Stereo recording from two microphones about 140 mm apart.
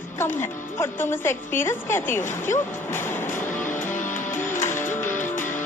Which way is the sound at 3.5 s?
65° left (ahead or behind).